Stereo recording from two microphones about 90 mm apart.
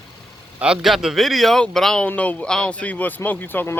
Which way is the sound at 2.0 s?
15° left (ahead or behind).